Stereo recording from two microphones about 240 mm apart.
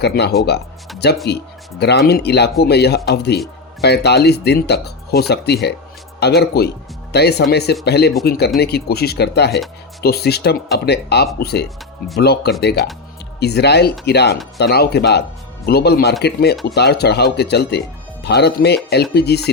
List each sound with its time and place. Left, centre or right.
0.0 s speech: left